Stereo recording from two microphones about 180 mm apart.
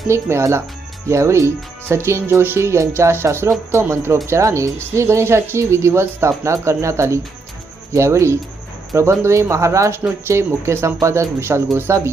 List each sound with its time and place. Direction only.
0.1 s speech: 15° right (ahead or behind)